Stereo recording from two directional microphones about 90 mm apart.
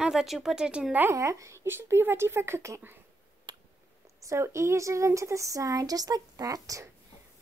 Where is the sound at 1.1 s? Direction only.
35° right (ahead or behind).